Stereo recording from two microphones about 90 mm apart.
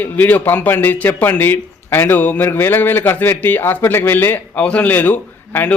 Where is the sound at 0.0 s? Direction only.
20° left (ahead or behind).